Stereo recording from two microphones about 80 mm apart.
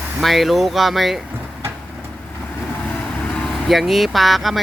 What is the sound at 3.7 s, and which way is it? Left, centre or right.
Speech, centre.